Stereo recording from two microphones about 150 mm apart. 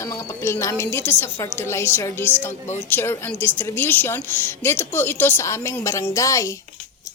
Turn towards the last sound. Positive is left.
turn(degrees=20)  # may be behind; listen again after turning